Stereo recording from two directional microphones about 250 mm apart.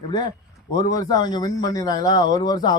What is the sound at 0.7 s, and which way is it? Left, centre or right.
A man's voice, centre.